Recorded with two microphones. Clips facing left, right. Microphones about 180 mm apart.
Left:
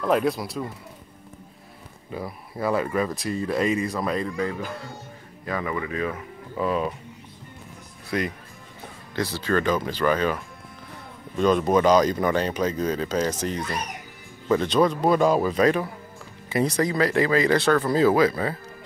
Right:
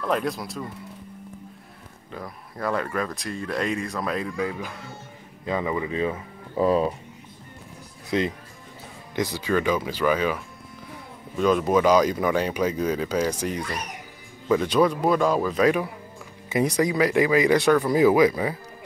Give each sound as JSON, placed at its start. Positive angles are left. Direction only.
{"t": 0.0, "sound": "speech", "side_deg": 5}
{"t": 2.1, "sound": "speech", "side_deg": 5}
{"t": 5.4, "sound": "speech", "side_deg": -20}
{"t": 8.1, "sound": "speech", "side_deg": -20}